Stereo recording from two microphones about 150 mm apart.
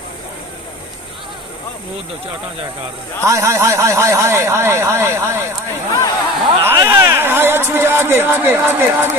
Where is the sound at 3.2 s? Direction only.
20° right (ahead or behind).